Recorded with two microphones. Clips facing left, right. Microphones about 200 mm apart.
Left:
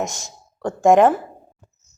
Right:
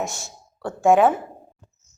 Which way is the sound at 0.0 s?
40° left (ahead or behind).